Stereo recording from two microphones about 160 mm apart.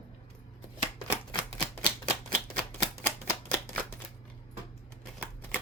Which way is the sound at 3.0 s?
10° left (ahead or behind).